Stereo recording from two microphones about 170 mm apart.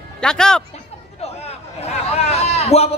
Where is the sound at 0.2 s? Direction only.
5° left (ahead or behind).